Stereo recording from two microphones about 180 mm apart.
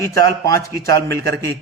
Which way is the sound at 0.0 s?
15° left (ahead or behind).